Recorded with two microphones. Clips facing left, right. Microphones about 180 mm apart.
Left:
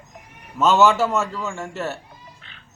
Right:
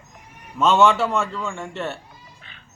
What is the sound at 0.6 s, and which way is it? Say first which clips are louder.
A man's voice: left 1 dB; centre (ahead or behind).